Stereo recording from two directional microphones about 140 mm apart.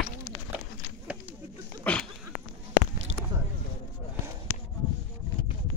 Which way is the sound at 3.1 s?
60° right (ahead or behind).